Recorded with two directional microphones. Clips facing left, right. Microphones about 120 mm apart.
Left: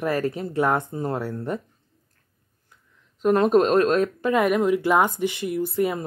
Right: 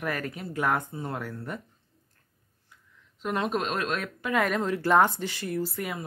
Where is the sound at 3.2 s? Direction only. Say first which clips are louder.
Left 11 dB; 45° left (ahead or behind).